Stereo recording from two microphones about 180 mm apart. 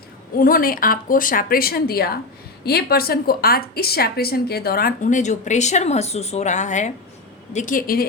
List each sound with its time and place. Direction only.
0.3 s a woman's voice: 50° left (ahead or behind)